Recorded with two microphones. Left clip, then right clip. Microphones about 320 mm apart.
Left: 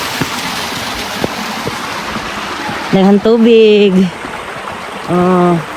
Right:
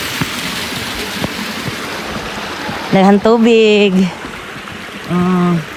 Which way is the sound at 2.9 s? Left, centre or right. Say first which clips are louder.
Even; right.